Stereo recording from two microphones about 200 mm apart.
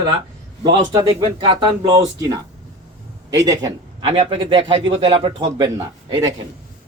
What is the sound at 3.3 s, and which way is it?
A man's voice, 15° right (ahead or behind).